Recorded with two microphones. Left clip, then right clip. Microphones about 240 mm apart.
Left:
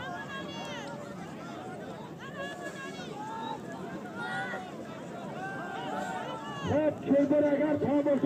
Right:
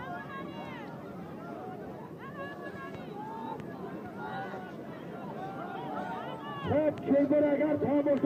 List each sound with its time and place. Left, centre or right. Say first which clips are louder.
6.7 s a man's voice: even; left